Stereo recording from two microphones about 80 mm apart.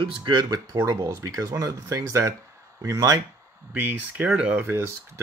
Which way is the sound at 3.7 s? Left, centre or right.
Right.